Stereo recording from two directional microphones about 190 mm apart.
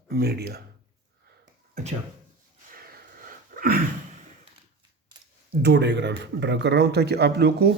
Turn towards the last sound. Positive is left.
turn(degrees=-60)  # may be behind; listen again after turning